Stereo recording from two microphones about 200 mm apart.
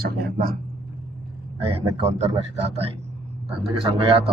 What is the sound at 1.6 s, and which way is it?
Speech, 30° right (ahead or behind).